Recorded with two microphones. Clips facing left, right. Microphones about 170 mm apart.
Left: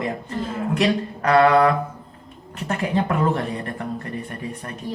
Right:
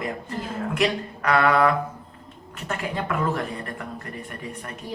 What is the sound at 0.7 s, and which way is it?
A woman's voice, 35° left (ahead or behind).